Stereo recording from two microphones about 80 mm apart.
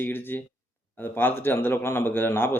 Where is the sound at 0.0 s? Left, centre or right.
Left.